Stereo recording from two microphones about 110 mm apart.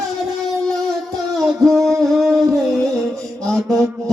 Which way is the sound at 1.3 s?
Centre (ahead or behind).